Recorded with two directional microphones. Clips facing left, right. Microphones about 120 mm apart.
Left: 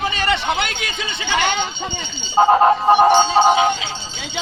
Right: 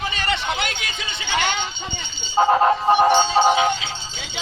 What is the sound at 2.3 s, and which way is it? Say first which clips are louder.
Music: left 3 dB; 20° left (ahead or behind).